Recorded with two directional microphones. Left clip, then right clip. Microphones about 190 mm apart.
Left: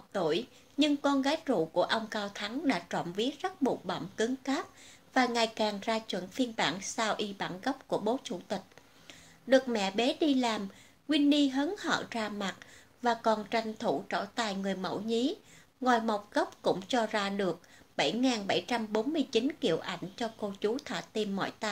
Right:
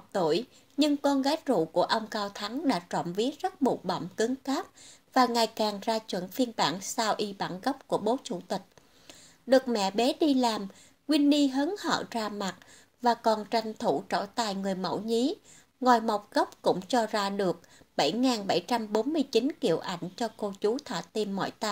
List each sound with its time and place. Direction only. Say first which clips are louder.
0.1 s a woman's voice: right 4 dB; 45° right (ahead or behind)